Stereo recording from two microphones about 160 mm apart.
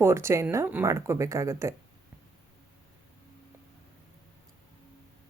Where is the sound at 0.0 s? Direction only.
15° right (ahead or behind).